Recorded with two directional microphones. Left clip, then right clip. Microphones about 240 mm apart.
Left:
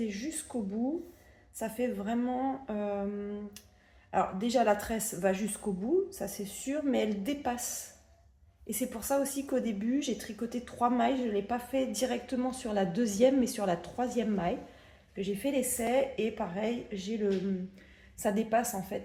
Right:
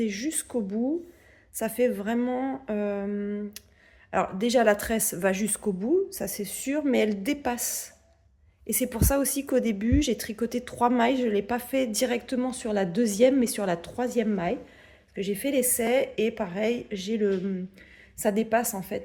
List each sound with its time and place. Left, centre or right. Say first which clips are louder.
0.0 s a woman's voice: right 7 dB; right
1.5 s a woman's voice: right 8 dB; right